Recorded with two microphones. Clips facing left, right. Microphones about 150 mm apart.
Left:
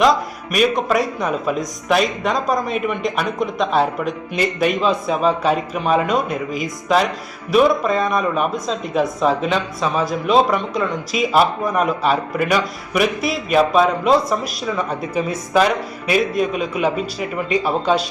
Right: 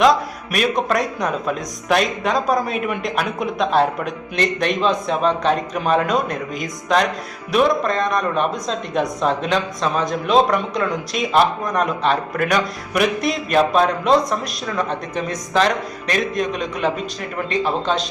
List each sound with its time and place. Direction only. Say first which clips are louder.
0.0 s speech: even; centre (ahead or behind)